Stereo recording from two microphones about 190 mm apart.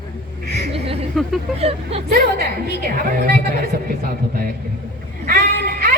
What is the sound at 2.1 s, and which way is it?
A woman's voice, 50° right (ahead or behind).